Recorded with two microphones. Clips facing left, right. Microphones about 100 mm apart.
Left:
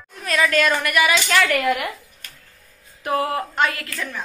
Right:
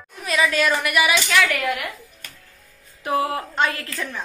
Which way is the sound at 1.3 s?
Centre (ahead or behind).